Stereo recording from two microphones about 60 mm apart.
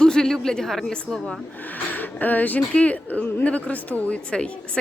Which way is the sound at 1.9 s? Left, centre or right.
Left.